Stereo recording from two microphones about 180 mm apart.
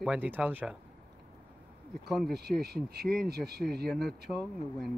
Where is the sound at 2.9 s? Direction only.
60° right (ahead or behind).